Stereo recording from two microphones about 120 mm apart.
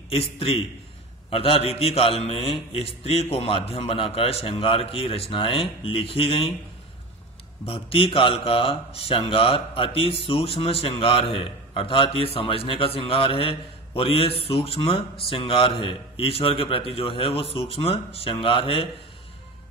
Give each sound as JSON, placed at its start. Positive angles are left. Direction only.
{"t": 0.1, "sound": "speech", "side_deg": 55}
{"t": 7.6, "sound": "speech", "side_deg": 50}